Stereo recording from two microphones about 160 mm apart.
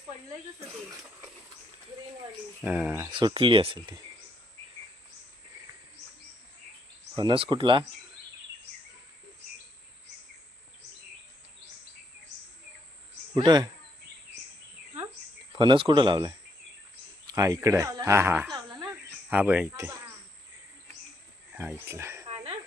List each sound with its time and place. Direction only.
2.6 s speech: 10° right (ahead or behind)
3.0 s speech: 30° right (ahead or behind)
7.2 s speech: 30° right (ahead or behind)
13.3 s speech: 25° right (ahead or behind)
15.5 s speech: 30° right (ahead or behind)
17.3 s speech: 20° right (ahead or behind)
18.5 s a sound: 15° right (ahead or behind)
21.5 s speech: 10° right (ahead or behind)